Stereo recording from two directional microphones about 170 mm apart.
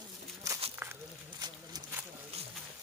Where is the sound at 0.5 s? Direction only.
20° right (ahead or behind).